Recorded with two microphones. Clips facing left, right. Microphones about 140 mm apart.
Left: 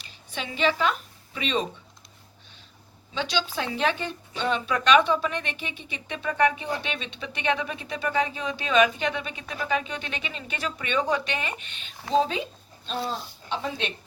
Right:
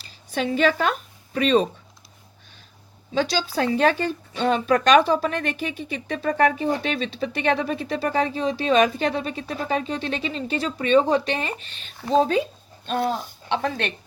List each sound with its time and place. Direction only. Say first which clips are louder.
0.0 s a woman's voice: right 10 dB; 45° right (ahead or behind)
3.2 s a woman's voice: right 6 dB; 35° right (ahead or behind)
12.8 s a woman's voice: right 7 dB; 55° right (ahead or behind)